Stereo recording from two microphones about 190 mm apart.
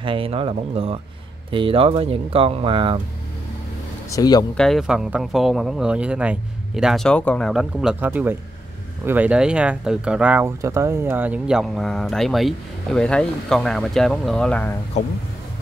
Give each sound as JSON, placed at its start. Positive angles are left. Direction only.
{"t": 0.0, "sound": "speech", "side_deg": -30}
{"t": 4.1, "sound": "speech", "side_deg": 20}
{"t": 4.6, "sound": "speech", "side_deg": 0}